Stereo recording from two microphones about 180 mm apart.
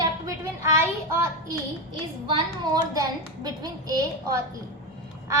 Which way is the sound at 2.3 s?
20° right (ahead or behind).